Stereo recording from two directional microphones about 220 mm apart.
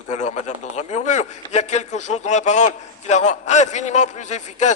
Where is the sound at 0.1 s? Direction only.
35° left (ahead or behind).